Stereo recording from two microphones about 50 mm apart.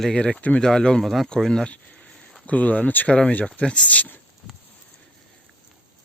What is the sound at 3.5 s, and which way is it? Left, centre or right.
Speech, left.